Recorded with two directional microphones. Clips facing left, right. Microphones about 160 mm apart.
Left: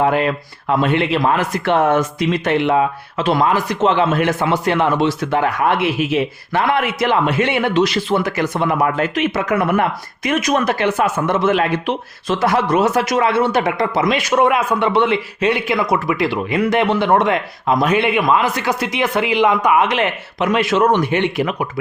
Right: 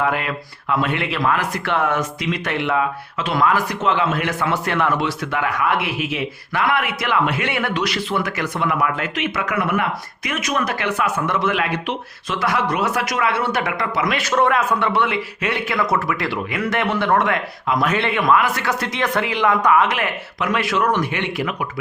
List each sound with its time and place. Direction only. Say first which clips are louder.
0.0 s speech: left 6 dB; 30° left (ahead or behind)
15.5 s speech: left 3 dB; 15° left (ahead or behind)